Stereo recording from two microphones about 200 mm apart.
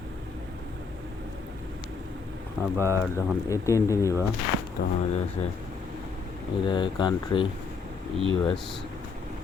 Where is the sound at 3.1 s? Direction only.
15° left (ahead or behind).